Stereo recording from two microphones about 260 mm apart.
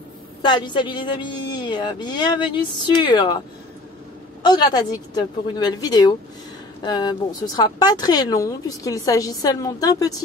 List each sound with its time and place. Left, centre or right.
0.4 s speech: centre
4.4 s speech: centre